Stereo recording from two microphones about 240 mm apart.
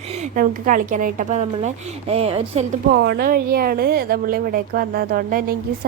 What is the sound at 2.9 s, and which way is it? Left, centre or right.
A woman's voice, right.